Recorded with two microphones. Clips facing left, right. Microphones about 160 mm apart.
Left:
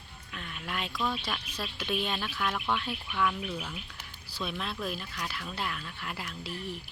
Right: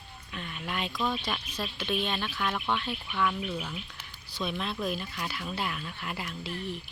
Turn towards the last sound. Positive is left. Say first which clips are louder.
# right 2 dB
turn(degrees=5)  # may be behind; listen again after turning